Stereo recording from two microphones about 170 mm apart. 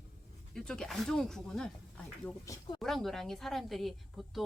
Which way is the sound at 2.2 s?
20° left (ahead or behind).